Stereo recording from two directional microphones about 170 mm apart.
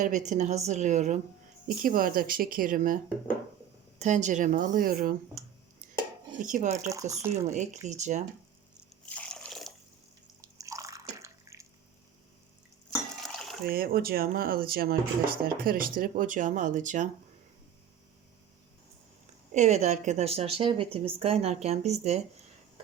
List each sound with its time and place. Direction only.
0.0 s speech: 45° right (ahead or behind)
1.6 s speech: 55° right (ahead or behind)
6.4 s speech: 45° right (ahead or behind)
9.0 s drip: 5° left (ahead or behind)
10.4 s bathtub: 20° right (ahead or behind)
13.2 s a sound: centre (ahead or behind)
13.7 s speech: 65° right (ahead or behind); by 17.1 s 45° right (ahead or behind)
19.5 s speech: 40° right (ahead or behind)